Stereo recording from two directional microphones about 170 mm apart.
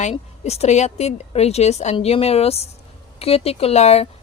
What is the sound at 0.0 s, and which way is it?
A woman's voice, 40° left (ahead or behind).